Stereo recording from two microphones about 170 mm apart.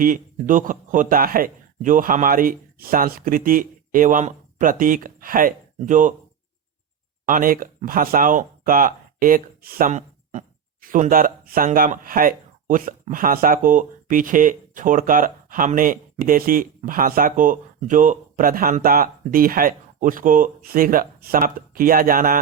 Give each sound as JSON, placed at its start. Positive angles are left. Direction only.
{"t": 0.0, "sound": "a man's voice", "side_deg": -55}
{"t": 7.3, "sound": "a man's voice", "side_deg": -55}